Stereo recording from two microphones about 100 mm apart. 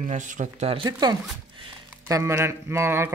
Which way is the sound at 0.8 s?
45° right (ahead or behind).